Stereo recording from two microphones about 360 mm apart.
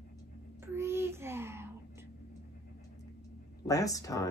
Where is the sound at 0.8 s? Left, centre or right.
Centre.